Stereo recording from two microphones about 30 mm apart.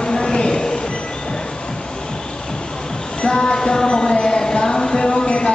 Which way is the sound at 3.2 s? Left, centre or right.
Left.